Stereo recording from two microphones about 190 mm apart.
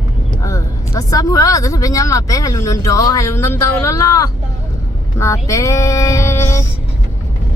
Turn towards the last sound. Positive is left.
turn(degrees=15)  # may be behind; listen again after turning